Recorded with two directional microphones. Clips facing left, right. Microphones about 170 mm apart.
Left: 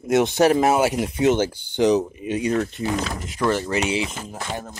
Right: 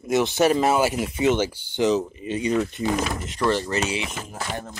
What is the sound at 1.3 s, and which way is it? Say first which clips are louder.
Speech: left 2 dB; 15° left (ahead or behind).